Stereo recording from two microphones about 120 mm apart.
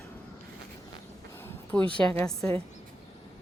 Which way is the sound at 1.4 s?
15° left (ahead or behind).